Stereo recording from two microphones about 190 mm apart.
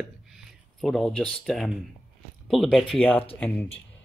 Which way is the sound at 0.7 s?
Centre (ahead or behind).